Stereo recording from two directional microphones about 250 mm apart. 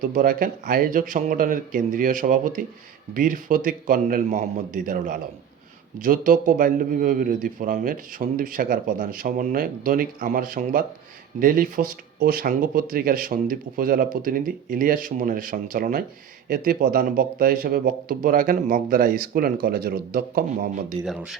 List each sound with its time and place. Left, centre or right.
0.0 s a man's voice: right
21.0 s speech: centre